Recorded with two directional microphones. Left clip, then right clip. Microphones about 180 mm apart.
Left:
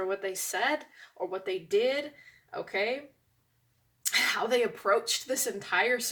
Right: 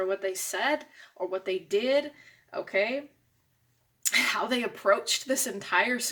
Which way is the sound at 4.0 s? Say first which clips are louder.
Right 2 dB; 45° right (ahead or behind).